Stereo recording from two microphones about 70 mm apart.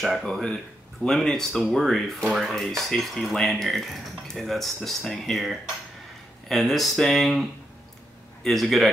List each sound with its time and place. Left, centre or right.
0.0 s speech: centre
8.5 s speech: centre